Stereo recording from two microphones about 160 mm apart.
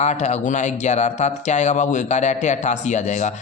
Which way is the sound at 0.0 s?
45° left (ahead or behind).